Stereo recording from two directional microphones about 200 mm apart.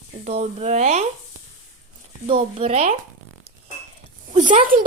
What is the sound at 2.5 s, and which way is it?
Speech, 30° right (ahead or behind).